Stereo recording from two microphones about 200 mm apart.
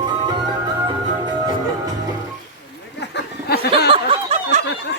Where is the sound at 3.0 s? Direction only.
60° left (ahead or behind).